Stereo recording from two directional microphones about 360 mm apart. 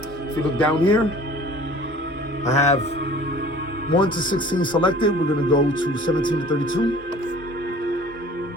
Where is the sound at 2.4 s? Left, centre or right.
Centre.